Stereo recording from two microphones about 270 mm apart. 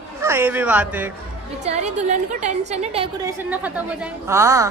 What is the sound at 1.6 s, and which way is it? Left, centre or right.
A woman's voice, right.